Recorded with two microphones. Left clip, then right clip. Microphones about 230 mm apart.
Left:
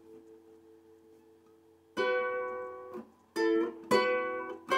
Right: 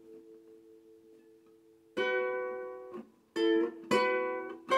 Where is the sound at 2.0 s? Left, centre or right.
Centre.